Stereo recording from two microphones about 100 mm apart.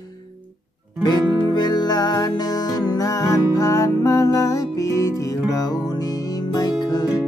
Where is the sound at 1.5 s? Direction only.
45° left (ahead or behind).